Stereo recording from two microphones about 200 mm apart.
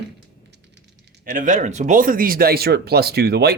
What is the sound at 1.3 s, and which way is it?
Speech, 40° right (ahead or behind).